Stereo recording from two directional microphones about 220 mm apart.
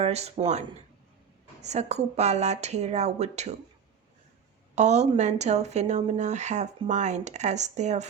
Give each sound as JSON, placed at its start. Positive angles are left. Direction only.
{"t": 0.0, "sound": "speech", "side_deg": -30}
{"t": 1.6, "sound": "speech", "side_deg": -30}
{"t": 4.7, "sound": "speech", "side_deg": -30}